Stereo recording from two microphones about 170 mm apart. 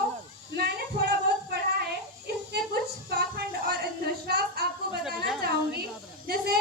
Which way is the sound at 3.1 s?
65° right (ahead or behind).